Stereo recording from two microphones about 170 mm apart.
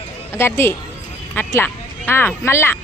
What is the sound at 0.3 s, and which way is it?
A woman's voice, 15° left (ahead or behind).